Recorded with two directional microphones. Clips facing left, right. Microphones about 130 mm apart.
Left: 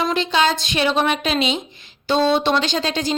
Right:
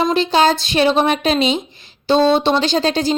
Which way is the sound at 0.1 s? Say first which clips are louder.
Right 4 dB; 35° right (ahead or behind).